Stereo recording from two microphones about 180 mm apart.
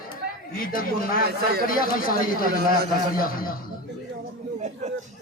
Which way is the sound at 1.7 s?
50° left (ahead or behind).